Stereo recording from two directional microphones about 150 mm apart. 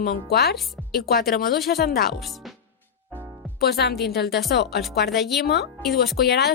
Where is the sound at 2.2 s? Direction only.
Centre (ahead or behind).